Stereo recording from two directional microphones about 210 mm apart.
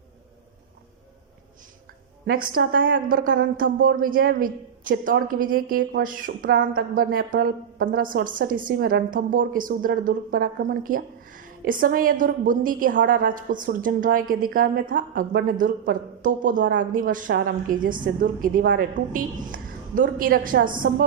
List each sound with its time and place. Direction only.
2.2 s a woman's voice: 45° right (ahead or behind)